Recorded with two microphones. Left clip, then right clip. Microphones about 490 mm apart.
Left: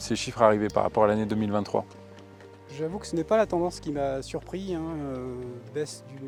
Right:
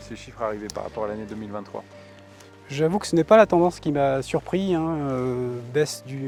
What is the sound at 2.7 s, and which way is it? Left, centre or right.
Speech, right.